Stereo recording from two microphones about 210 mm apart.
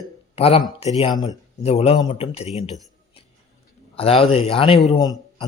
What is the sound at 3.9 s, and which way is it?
A man's voice, 25° left (ahead or behind).